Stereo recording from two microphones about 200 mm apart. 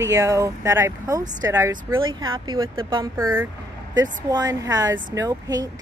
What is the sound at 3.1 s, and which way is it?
A woman's voice, 10° right (ahead or behind).